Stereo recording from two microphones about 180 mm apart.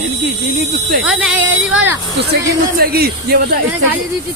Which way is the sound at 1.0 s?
5° right (ahead or behind).